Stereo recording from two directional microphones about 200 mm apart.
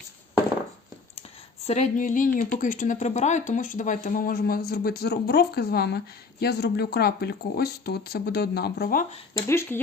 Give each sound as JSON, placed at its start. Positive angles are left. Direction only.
{"t": 1.6, "sound": "speech", "side_deg": 35}
{"t": 9.5, "sound": "speech", "side_deg": 10}